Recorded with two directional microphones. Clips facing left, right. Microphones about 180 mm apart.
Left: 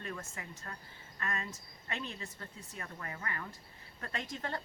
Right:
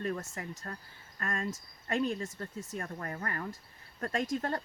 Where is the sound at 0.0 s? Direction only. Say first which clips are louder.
Right 8 dB; 40° right (ahead or behind).